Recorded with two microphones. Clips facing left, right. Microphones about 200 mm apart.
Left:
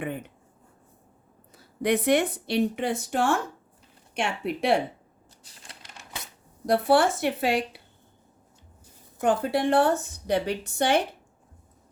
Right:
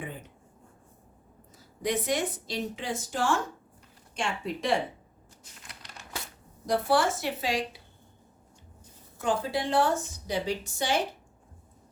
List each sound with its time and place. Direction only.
0.0 s speech: 65° left (ahead or behind)
1.5 s a woman's voice: 65° left (ahead or behind)
5.5 s typewriter: 30° left (ahead or behind)
6.9 s a woman's voice: 60° left (ahead or behind)
9.2 s a woman's voice: 60° left (ahead or behind)